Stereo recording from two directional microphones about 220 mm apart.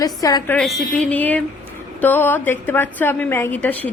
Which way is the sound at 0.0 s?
15° left (ahead or behind).